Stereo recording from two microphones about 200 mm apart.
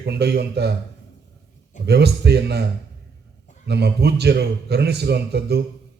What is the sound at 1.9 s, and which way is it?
Speech, 55° right (ahead or behind).